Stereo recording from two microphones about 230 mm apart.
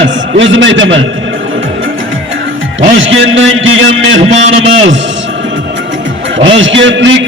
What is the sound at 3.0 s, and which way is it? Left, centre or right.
A man's voice, right.